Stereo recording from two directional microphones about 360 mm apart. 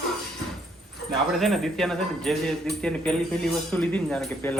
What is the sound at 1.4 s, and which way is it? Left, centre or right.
Speech, centre.